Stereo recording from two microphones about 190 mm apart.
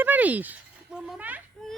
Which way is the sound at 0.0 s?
10° right (ahead or behind).